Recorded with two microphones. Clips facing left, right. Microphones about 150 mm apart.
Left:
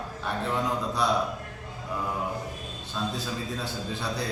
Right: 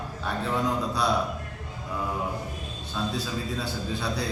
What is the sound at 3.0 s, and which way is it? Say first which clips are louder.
Speech: right 1 dB; centre (ahead or behind).